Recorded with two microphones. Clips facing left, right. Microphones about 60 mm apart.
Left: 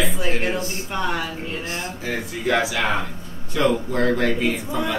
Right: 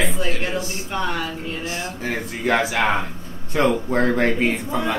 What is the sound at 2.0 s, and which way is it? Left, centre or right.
Speech, right.